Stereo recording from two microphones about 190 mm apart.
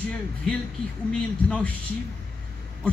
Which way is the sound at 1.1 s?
5° left (ahead or behind).